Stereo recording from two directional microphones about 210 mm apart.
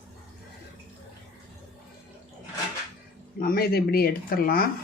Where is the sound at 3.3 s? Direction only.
45° left (ahead or behind).